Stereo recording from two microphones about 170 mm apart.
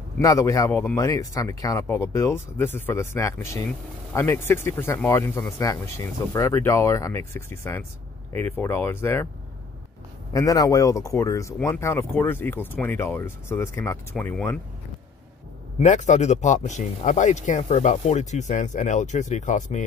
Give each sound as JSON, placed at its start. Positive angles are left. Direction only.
{"t": 0.2, "sound": "speech", "side_deg": 20}
{"t": 10.3, "sound": "speech", "side_deg": 20}
{"t": 15.8, "sound": "speech", "side_deg": 45}